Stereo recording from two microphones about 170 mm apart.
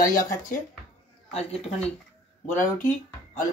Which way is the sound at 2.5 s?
55° left (ahead or behind).